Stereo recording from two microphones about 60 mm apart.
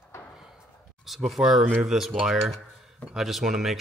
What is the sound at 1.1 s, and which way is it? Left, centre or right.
Speech, centre.